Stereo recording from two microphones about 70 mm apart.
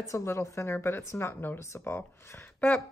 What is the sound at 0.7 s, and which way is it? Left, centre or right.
Speech, left.